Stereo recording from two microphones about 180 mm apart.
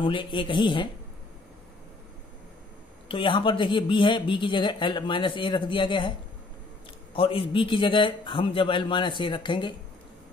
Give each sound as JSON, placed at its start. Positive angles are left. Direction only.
{"t": 0.0, "sound": "speech", "side_deg": 30}
{"t": 3.1, "sound": "speech", "side_deg": 30}
{"t": 7.2, "sound": "speech", "side_deg": 30}